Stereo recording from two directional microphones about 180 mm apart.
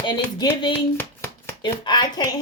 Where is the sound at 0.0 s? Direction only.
25° left (ahead or behind).